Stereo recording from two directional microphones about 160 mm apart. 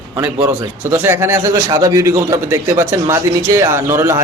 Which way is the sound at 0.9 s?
15° right (ahead or behind).